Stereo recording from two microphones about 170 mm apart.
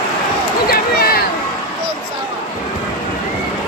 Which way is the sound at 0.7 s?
60° left (ahead or behind).